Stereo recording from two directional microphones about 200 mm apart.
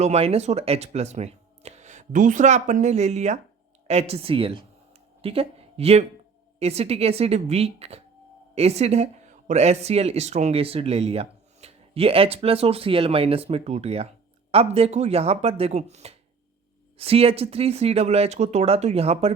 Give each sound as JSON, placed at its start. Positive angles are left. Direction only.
{"t": 0.0, "sound": "speech", "side_deg": -30}